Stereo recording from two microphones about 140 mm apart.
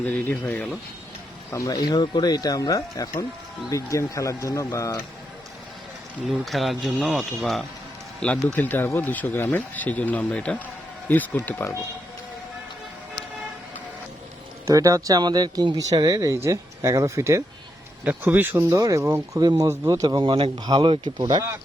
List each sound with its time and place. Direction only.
0.0 s speech: 15° left (ahead or behind)
6.2 s speech: centre (ahead or behind); by 11.8 s 20° left (ahead or behind)
14.7 s speech: 25° right (ahead or behind)